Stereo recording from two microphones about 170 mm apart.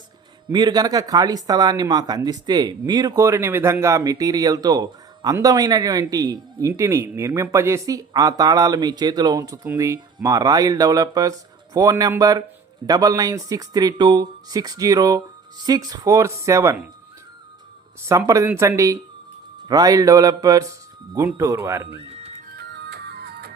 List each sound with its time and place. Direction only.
0.5 s speech: 25° right (ahead or behind)
18.0 s speech: 15° right (ahead or behind)
22.5 s music: 75° right (ahead or behind)